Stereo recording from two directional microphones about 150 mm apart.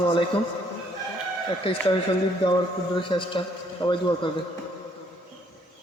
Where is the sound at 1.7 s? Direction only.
40° left (ahead or behind).